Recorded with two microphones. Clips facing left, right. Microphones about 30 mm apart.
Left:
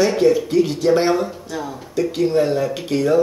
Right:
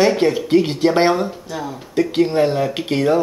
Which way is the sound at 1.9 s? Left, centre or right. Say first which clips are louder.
Right 1 dB; right.